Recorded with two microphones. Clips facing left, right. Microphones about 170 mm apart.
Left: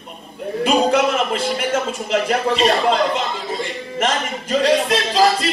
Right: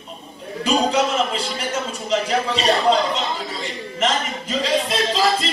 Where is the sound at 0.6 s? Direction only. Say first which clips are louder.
Left 3 dB; 55° left (ahead or behind).